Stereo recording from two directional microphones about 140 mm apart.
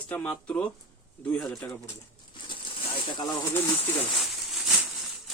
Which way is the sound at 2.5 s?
35° left (ahead or behind).